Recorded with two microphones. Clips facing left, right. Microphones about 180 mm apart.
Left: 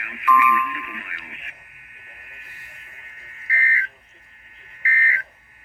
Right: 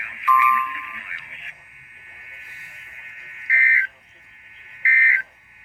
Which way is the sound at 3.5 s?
40° left (ahead or behind).